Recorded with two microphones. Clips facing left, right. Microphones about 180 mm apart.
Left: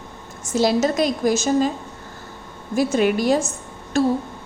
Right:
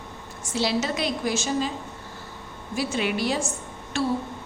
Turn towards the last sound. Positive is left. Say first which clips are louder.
# left 7 dB
turn(degrees=40)  # may be behind; listen again after turning